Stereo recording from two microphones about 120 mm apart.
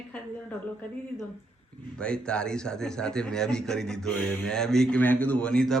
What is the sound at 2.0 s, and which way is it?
A man's voice, 10° left (ahead or behind).